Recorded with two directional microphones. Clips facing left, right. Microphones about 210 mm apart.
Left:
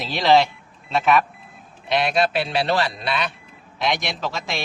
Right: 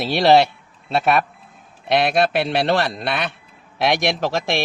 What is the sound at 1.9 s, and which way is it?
A man's voice, 60° right (ahead or behind).